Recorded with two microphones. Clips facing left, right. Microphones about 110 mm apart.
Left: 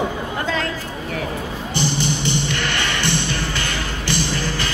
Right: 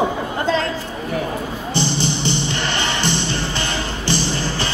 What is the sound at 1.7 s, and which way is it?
Music, 30° right (ahead or behind).